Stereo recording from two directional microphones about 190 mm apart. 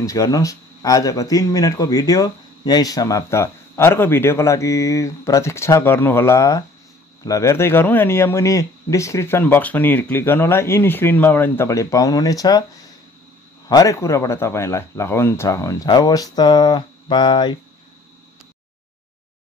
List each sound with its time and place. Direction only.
0.0 s speech: 15° left (ahead or behind)
13.7 s speech: 20° left (ahead or behind)